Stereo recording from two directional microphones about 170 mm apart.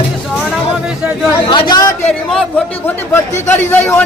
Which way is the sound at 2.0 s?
5° left (ahead or behind).